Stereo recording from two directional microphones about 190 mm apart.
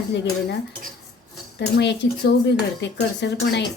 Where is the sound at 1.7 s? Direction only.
65° left (ahead or behind).